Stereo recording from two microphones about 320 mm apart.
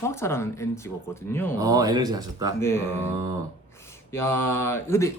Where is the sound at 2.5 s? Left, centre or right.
Centre.